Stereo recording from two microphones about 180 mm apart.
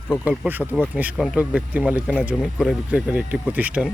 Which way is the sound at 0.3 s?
10° right (ahead or behind).